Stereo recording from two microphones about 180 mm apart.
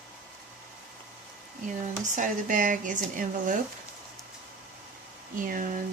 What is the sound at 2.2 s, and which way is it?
Speech, 45° right (ahead or behind).